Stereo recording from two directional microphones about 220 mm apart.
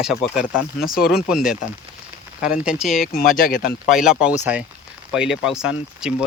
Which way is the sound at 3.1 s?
40° left (ahead or behind).